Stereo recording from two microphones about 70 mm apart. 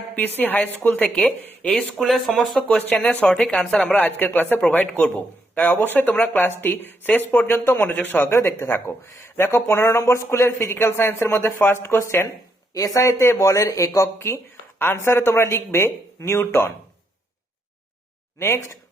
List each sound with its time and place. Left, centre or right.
0.2 s speech: left
1.2 s speech: centre
3.9 s speech: left
12.7 s speech: left
18.3 s speech: left